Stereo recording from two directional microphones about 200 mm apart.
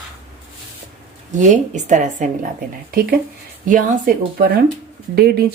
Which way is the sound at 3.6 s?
40° right (ahead or behind).